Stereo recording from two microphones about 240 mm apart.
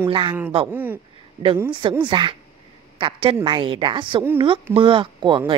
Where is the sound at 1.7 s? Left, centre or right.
Centre.